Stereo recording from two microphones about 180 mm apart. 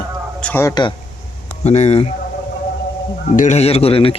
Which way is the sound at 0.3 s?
10° left (ahead or behind).